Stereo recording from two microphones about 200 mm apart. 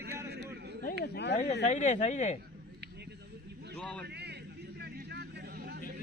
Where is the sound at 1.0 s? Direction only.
55° left (ahead or behind).